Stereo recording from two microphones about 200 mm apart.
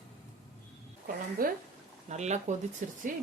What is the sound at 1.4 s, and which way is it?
Speech, 45° right (ahead or behind).